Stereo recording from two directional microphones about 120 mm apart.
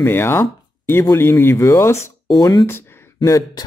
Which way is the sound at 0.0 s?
20° left (ahead or behind).